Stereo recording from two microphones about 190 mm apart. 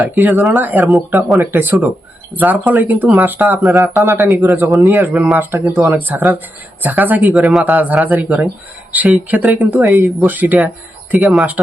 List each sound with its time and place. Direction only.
0.0 s speech: 10° right (ahead or behind)